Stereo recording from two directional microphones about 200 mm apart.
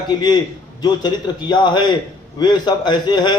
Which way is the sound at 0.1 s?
20° left (ahead or behind).